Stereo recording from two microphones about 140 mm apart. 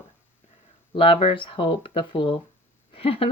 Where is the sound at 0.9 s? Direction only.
40° left (ahead or behind).